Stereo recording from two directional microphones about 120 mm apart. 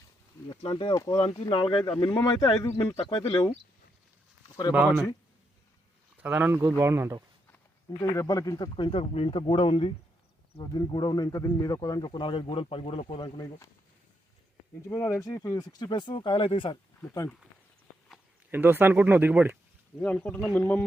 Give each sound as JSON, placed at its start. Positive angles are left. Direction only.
{"t": 0.5, "sound": "speech", "side_deg": 45}
{"t": 0.9, "sound": "speech", "side_deg": 30}
{"t": 1.2, "sound": "speech", "side_deg": 50}
{"t": 2.6, "sound": "speech", "side_deg": 25}
{"t": 3.0, "sound": "speech", "side_deg": 40}
{"t": 4.4, "sound": "a sound", "side_deg": 40}
{"t": 4.7, "sound": "speech", "side_deg": -10}
{"t": 6.2, "sound": "speech", "side_deg": -15}
{"t": 8.1, "sound": "speech", "side_deg": 25}
{"t": 8.9, "sound": "speech", "side_deg": 55}
{"t": 13.2, "sound": "speech", "side_deg": 30}
{"t": 14.8, "sound": "speech", "side_deg": 20}
{"t": 18.5, "sound": "speech", "side_deg": -15}
{"t": 20.0, "sound": "speech", "side_deg": 5}